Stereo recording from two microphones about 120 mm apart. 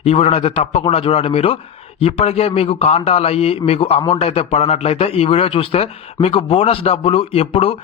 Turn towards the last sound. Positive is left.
turn(degrees=55)  # may be behind; listen again after turning